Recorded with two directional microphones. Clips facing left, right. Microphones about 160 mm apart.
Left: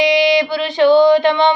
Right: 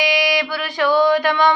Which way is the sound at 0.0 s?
25° left (ahead or behind).